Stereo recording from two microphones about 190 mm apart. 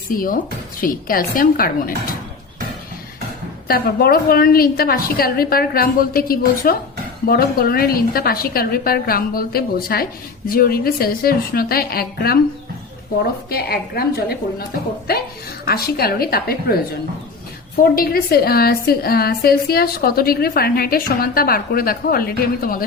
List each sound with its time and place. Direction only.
0.1 s a woman's voice: 45° left (ahead or behind)
3.7 s a woman's voice: 55° left (ahead or behind)
13.5 s a woman's voice: 55° left (ahead or behind)
15.6 s a woman's voice: 55° left (ahead or behind)
17.8 s a woman's voice: 50° left (ahead or behind)